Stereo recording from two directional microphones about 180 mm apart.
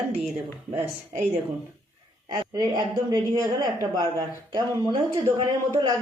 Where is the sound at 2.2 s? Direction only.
25° right (ahead or behind).